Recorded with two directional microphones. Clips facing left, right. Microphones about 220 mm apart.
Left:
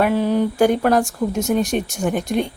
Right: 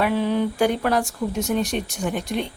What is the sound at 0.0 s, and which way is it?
Speech, 45° left (ahead or behind).